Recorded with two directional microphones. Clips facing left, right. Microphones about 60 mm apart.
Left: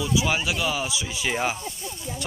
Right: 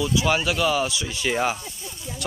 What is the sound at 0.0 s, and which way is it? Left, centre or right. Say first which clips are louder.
Speech: right 2 dB; centre.